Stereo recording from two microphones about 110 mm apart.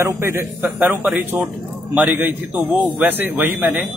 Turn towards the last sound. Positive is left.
turn(degrees=-15)  # may be behind; listen again after turning